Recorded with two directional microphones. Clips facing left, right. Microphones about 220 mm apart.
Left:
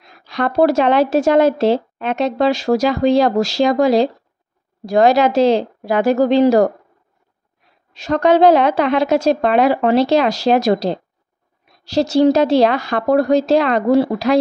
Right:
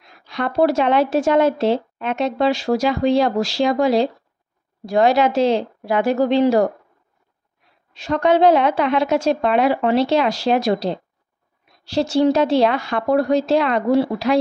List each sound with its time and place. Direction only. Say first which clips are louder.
0.2 s a sound: left 4 dB; 90° left
0.5 s speech: left 3 dB; 40° left (ahead or behind)
8.0 s speech: left 3 dB; 40° left (ahead or behind)